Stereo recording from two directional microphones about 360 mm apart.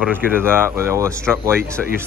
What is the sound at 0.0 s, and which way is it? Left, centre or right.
Speech, centre.